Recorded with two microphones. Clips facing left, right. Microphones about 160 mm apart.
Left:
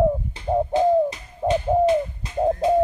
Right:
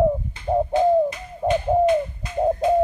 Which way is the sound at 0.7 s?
30° left (ahead or behind).